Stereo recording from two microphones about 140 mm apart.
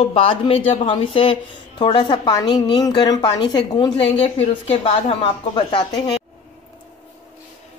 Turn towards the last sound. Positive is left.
turn(degrees=35)  # may be behind; listen again after turning